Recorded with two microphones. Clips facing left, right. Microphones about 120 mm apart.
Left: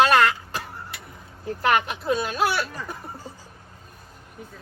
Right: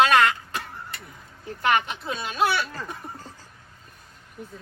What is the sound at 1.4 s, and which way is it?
Speech, 40° left (ahead or behind).